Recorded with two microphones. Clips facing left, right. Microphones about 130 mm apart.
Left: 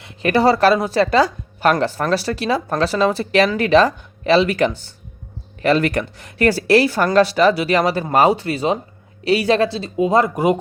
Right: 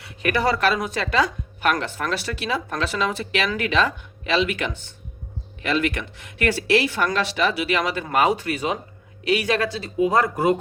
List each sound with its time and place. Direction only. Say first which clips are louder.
0.2 s a woman's voice: left 7 dB; 30° left (ahead or behind)